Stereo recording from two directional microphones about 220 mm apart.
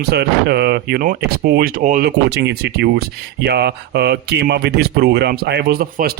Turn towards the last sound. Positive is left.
turn(degrees=-45)  # may be behind; listen again after turning